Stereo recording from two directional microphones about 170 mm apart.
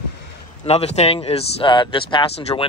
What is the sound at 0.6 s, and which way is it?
Speech, 40° left (ahead or behind).